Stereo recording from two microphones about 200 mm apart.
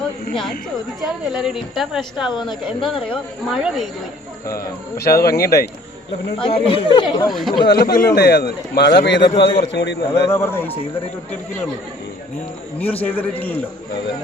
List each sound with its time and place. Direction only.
1.0 s a woman's voice: 5° right (ahead or behind)
2.8 s speech: 25° left (ahead or behind)
3.5 s a woman's voice: centre (ahead or behind)
4.5 s speech: 50° left (ahead or behind)
6.4 s speech: 25° left (ahead or behind)
7.3 s a woman's voice: centre (ahead or behind)
7.8 s a man's voice: 50° left (ahead or behind)
10.2 s a man's voice: 10° left (ahead or behind)
12.8 s a man's voice: 10° left (ahead or behind)